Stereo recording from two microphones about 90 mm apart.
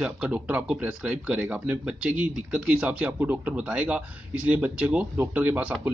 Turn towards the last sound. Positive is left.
turn(degrees=-15)  # may be behind; listen again after turning